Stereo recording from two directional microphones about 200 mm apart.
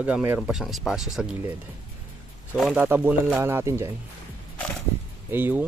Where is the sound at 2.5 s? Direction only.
5° right (ahead or behind).